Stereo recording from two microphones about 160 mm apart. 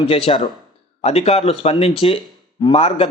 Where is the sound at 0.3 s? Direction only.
40° left (ahead or behind).